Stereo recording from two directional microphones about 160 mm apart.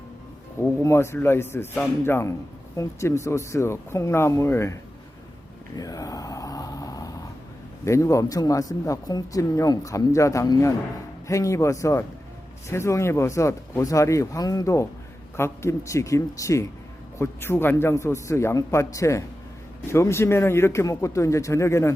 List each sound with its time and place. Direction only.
0.8 s speech: 15° left (ahead or behind)
5.7 s a sound: 20° left (ahead or behind)
7.9 s speech: 20° left (ahead or behind)